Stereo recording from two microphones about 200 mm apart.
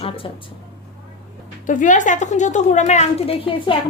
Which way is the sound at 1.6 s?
40° left (ahead or behind).